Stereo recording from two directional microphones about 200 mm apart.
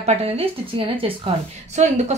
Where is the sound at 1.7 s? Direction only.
35° right (ahead or behind).